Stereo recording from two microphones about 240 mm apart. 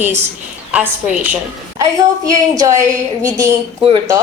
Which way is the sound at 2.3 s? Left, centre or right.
Centre.